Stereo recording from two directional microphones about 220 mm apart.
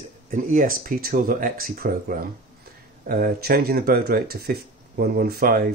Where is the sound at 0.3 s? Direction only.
40° right (ahead or behind).